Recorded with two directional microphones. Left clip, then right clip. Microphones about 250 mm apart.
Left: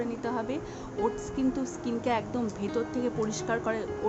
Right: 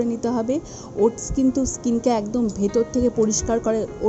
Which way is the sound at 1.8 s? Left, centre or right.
Right.